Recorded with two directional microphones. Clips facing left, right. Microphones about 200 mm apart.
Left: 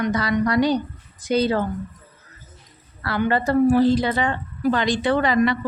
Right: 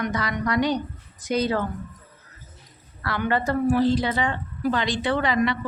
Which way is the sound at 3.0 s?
35° left (ahead or behind).